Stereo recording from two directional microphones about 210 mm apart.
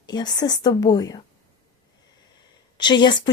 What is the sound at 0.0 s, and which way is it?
A woman's voice, 20° left (ahead or behind).